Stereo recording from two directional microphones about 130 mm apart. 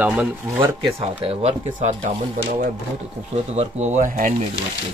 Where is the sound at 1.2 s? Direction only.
55° right (ahead or behind); by 4.3 s 90° right.